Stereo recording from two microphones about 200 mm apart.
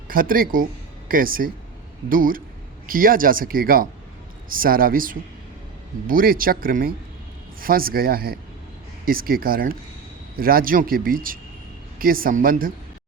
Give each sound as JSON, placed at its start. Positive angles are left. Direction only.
{"t": 0.1, "sound": "speech", "side_deg": -45}